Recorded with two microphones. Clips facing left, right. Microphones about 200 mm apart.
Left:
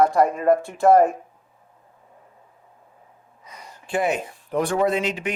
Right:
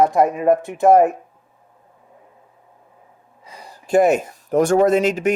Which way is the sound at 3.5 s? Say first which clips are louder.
Right 9 dB; 30° right (ahead or behind).